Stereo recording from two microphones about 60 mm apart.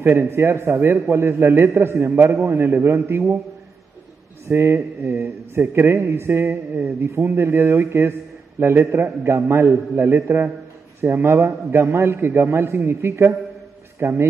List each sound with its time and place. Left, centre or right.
0.0 s a man's voice: right
4.5 s a man's voice: right